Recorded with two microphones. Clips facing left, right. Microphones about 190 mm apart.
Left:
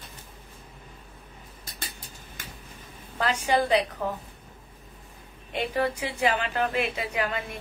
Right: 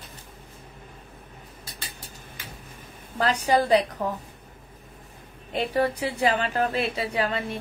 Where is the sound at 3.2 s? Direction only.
35° right (ahead or behind).